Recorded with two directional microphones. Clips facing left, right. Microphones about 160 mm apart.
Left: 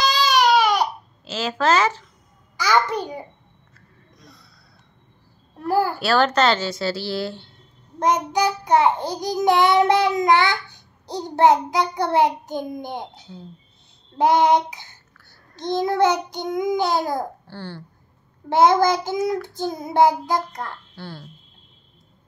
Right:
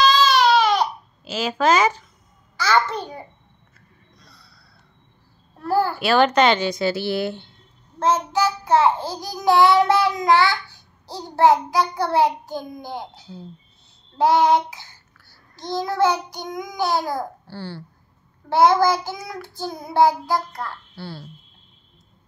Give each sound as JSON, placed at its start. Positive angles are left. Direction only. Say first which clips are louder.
{"t": 0.0, "sound": "baby cry", "louder": "right 2 dB", "side_deg": 15}
{"t": 1.2, "sound": "a woman's voice", "louder": "right 1 dB", "side_deg": -10}
{"t": 2.5, "sound": "a child's voice", "louder": "even", "side_deg": 15}
{"t": 4.2, "sound": "snort", "louder": "left 6 dB", "side_deg": 20}
{"t": 5.6, "sound": "a child's voice", "louder": "even", "side_deg": 15}
{"t": 6.0, "sound": "a woman's voice", "louder": "right 3 dB", "side_deg": -10}
{"t": 8.0, "sound": "child singing", "louder": "even", "side_deg": 15}
{"t": 17.5, "sound": "a woman's voice", "louder": "right 1 dB", "side_deg": -10}
{"t": 18.5, "sound": "child singing", "louder": "even", "side_deg": 20}
{"t": 20.9, "sound": "a woman's voice", "louder": "right 1 dB", "side_deg": -10}